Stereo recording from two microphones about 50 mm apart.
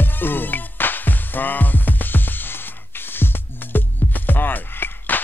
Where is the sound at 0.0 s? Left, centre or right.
Left.